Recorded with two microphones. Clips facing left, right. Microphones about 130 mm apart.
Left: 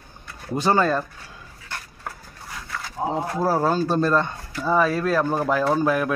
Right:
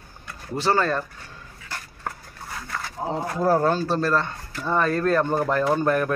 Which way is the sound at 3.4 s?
5° left (ahead or behind).